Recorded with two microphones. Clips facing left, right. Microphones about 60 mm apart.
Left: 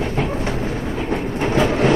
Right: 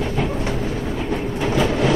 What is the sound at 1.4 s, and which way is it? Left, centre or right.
Train, left.